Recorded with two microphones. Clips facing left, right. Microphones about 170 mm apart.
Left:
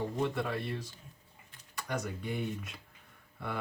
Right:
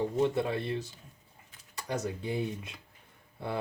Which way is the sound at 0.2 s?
25° right (ahead or behind).